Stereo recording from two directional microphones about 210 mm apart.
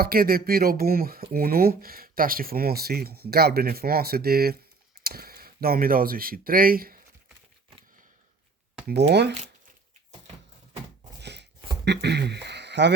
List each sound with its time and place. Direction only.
0.0 s speech: 45° right (ahead or behind)
8.9 s speech: 55° right (ahead or behind)
11.2 s a sound: 55° right (ahead or behind)
11.9 s speech: 55° right (ahead or behind)